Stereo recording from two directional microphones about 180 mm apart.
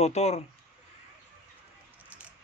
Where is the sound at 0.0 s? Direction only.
35° left (ahead or behind).